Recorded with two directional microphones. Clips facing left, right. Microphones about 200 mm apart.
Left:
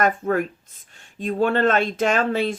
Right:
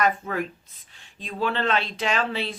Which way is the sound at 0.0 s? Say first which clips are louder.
Left 4 dB; 50° left (ahead or behind).